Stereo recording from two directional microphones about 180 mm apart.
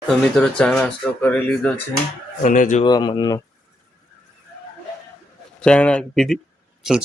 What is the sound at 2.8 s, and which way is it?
Speech, 25° left (ahead or behind).